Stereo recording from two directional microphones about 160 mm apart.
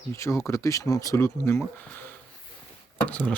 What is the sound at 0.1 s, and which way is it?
Speech, 20° left (ahead or behind).